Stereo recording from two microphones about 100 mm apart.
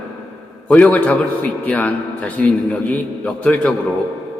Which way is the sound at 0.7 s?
15° left (ahead or behind).